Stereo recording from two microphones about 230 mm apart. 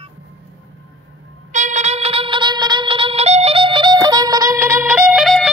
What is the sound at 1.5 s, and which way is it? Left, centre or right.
Music, right.